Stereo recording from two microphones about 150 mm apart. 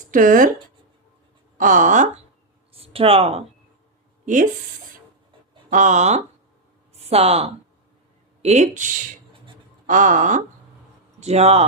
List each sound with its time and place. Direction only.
0.0 s speech: 65° right (ahead or behind)
1.5 s speech: 60° right (ahead or behind)
2.7 s speech: 40° right (ahead or behind)
5.7 s speech: 55° right (ahead or behind)
11.2 s speech: 45° right (ahead or behind)